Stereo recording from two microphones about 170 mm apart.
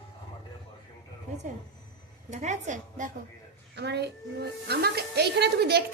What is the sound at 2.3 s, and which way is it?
Speech, 45° right (ahead or behind).